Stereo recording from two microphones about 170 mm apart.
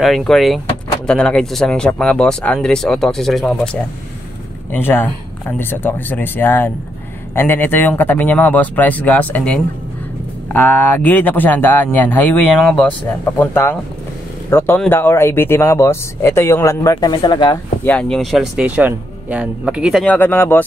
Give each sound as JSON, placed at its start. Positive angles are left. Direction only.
{"t": 0.0, "sound": "speech", "side_deg": 0}
{"t": 4.7, "sound": "speech", "side_deg": 10}
{"t": 17.8, "sound": "speech", "side_deg": 5}
{"t": 20.2, "sound": "speech", "side_deg": 10}